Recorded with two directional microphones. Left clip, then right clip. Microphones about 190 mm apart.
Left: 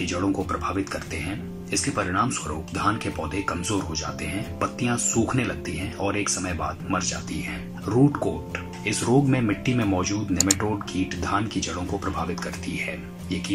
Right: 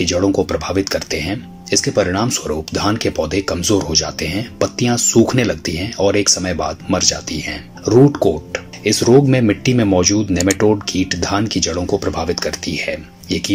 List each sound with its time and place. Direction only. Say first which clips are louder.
0.0 s speech: right 10 dB; 35° right (ahead or behind)
10.3 s speech: right 7 dB; centre (ahead or behind)
10.6 s speech: right 12 dB; 35° right (ahead or behind)